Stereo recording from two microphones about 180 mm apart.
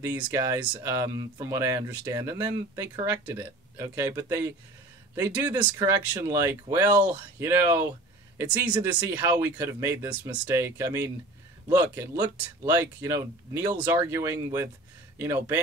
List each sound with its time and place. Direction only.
0.4 s speech: 20° right (ahead or behind)
12.2 s speech: 20° right (ahead or behind)